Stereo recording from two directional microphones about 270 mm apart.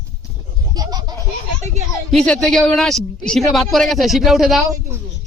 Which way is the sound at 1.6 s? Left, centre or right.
Right.